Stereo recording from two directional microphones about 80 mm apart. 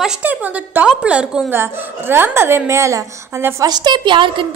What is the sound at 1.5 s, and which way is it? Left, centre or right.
A woman's voice, right.